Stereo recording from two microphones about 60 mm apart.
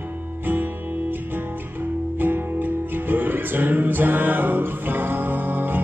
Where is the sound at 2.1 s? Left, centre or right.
Right.